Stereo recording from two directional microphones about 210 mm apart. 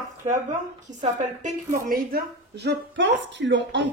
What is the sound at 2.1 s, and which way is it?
Speech, 55° right (ahead or behind).